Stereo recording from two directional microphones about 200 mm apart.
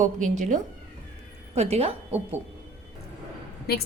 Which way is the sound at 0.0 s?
40° right (ahead or behind).